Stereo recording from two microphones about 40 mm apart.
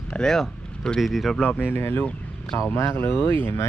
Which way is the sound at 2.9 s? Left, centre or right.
Left.